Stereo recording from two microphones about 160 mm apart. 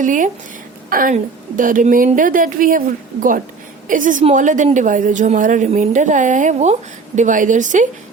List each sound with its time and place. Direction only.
0.0 s a woman's voice: 55° right (ahead or behind)
3.8 s a woman's voice: 55° right (ahead or behind)